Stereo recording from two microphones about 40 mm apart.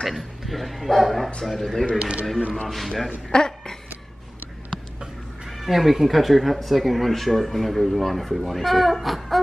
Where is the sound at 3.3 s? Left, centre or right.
Centre.